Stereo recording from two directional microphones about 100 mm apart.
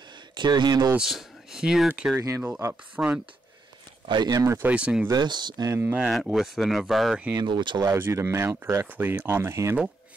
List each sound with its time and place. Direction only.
0.3 s speech: 50° right (ahead or behind)
0.9 s speech: 5° right (ahead or behind)
4.1 s speech: 45° right (ahead or behind)
4.6 s speech: 10° right (ahead or behind)
5.1 s speech: 45° right (ahead or behind)
5.7 s speech: 20° right (ahead or behind)
6.3 s speech: 5° right (ahead or behind)
7.3 s speech: 50° right (ahead or behind)
7.9 s speech: 25° right (ahead or behind)